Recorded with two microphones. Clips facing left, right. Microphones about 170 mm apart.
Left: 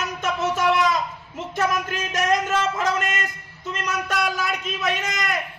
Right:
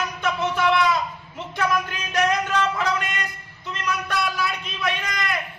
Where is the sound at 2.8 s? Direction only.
45° left (ahead or behind).